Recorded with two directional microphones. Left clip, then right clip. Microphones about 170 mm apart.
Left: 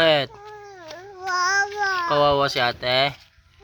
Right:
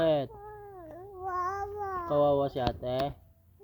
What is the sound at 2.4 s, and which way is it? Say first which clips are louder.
Speech: left 9 dB; 10° right (ahead or behind).